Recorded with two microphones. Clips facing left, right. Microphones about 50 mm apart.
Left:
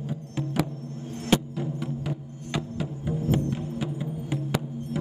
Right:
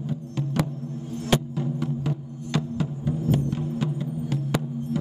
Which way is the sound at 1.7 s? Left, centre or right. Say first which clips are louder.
Right 4 dB; centre.